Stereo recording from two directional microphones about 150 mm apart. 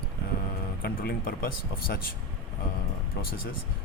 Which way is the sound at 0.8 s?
80° left.